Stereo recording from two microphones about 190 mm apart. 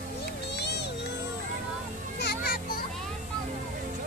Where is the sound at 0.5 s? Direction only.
60° left (ahead or behind).